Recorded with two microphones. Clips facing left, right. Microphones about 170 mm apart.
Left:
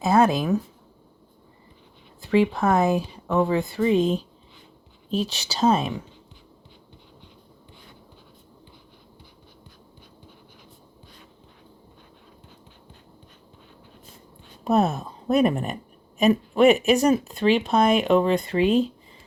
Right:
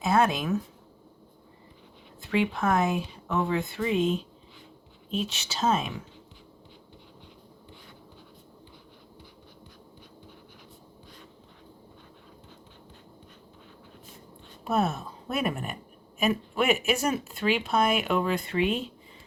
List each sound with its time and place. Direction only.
0.0 s a woman's voice: 35° left (ahead or behind)
2.3 s a woman's voice: 35° left (ahead or behind)
14.6 s a woman's voice: 35° left (ahead or behind)